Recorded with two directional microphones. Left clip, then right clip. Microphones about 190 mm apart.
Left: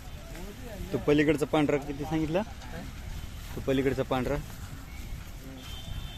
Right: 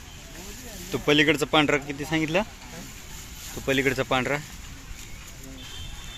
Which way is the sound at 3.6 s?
Centre (ahead or behind).